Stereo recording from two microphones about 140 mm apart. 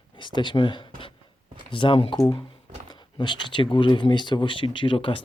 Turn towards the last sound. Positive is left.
turn(degrees=40)  # may be behind; listen again after turning